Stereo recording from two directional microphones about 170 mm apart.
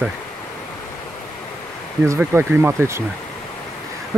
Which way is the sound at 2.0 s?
15° right (ahead or behind).